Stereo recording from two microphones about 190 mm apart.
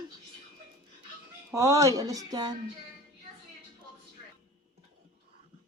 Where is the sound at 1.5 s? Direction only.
15° right (ahead or behind).